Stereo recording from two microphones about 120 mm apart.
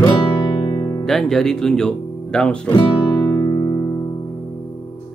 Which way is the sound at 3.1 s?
15° left (ahead or behind).